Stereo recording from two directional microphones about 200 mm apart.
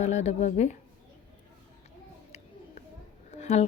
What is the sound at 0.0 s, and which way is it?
Speech, 35° left (ahead or behind).